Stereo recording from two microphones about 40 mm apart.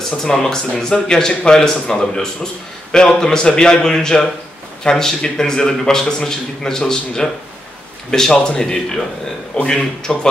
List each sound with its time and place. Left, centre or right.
0.2 s a man's voice: centre
8.3 s a man's voice: centre